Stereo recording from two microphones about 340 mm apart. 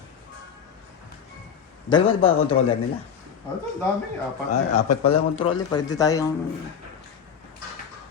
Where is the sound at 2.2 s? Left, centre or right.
Left.